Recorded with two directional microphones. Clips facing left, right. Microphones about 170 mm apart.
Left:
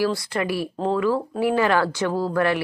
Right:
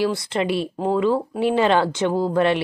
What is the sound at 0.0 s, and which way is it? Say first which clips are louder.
Speech: right 1 dB; 20° right (ahead or behind).